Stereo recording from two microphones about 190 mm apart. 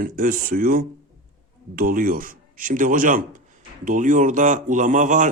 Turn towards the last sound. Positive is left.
turn(degrees=-40)  # may be behind; listen again after turning